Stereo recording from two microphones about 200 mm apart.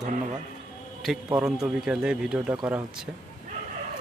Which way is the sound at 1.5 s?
5° right (ahead or behind).